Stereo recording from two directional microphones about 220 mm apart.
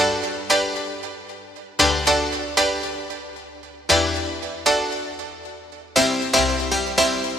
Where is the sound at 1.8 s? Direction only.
Centre (ahead or behind).